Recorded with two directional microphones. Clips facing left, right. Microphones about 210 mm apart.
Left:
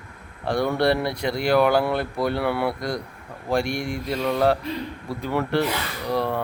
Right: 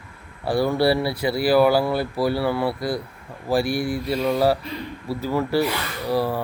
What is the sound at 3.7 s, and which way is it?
Mantra, 35° right (ahead or behind).